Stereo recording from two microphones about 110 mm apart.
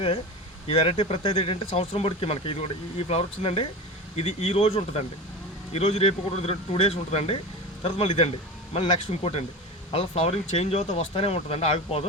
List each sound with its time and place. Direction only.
0.7 s speech: 55° left (ahead or behind)
5.7 s speech: 65° left (ahead or behind)
7.9 s speech: 50° left (ahead or behind); by 12.0 s 65° left (ahead or behind)